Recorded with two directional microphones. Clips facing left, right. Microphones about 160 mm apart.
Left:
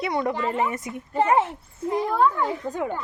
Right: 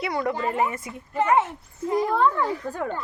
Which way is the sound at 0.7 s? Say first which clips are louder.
Left 3 dB; 20° left (ahead or behind).